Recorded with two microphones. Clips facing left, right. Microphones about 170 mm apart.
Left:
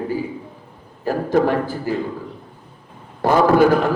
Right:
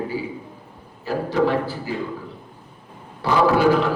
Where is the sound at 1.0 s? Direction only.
50° left (ahead or behind).